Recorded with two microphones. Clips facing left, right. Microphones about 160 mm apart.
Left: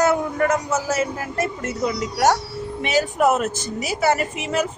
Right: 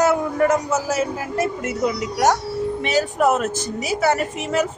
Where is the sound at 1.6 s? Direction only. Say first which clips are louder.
Right 2 dB; 5° right (ahead or behind).